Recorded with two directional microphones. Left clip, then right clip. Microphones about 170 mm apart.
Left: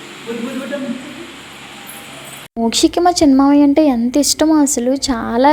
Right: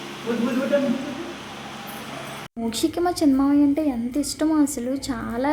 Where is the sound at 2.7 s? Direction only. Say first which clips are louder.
Left 10 dB; 40° left (ahead or behind).